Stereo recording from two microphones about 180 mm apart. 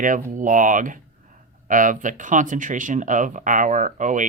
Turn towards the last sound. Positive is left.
turn(degrees=-45)  # may be behind; listen again after turning